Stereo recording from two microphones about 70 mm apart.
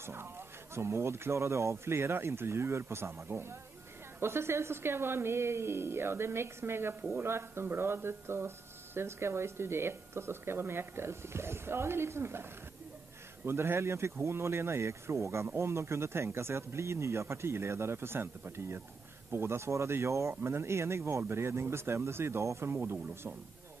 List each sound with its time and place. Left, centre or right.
0.0 s a sound: right
0.7 s speech: right
13.5 s speech: right